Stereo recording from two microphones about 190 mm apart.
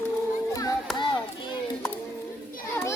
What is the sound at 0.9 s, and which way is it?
Chop, centre (ahead or behind).